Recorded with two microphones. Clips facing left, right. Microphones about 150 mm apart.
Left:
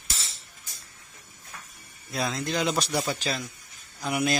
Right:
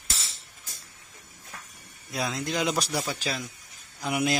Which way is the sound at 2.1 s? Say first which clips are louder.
Left 1 dB; 10° right (ahead or behind).